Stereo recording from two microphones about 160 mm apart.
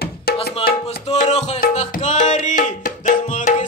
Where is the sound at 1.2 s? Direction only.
45° left (ahead or behind).